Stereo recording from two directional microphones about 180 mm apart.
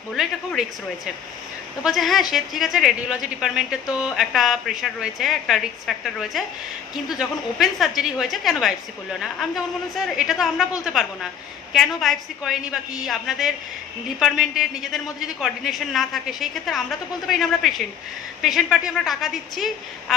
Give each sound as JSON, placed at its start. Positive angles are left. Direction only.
{"t": 0.1, "sound": "speech", "side_deg": 0}
{"t": 1.8, "sound": "speech", "side_deg": 0}